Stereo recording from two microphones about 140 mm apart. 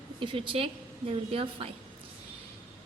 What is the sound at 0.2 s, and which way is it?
A woman's voice, 35° right (ahead or behind).